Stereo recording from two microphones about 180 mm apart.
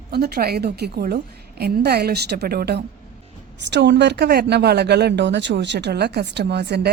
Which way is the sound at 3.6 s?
75° right (ahead or behind).